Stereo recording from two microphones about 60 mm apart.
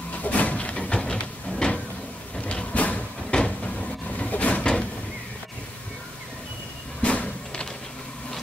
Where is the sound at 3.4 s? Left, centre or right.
Centre.